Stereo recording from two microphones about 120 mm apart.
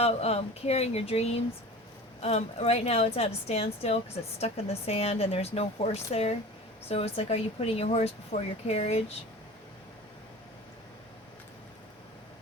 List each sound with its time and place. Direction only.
0.0 s a woman's voice: 60° left (ahead or behind)